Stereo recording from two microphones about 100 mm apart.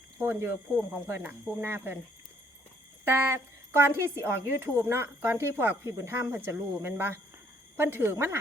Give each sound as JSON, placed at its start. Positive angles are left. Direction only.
{"t": 0.2, "sound": "speech", "side_deg": -20}
{"t": 3.0, "sound": "speech", "side_deg": -25}